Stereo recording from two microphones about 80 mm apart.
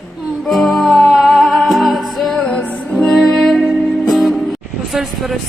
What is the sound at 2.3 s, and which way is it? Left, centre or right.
Music, centre.